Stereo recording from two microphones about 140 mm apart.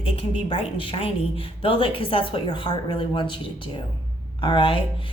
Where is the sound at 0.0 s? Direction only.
40° left (ahead or behind).